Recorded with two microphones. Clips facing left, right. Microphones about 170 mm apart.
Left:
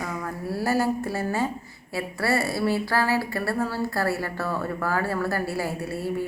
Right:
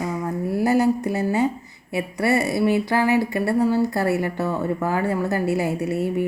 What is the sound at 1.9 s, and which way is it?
A woman's voice, 20° right (ahead or behind).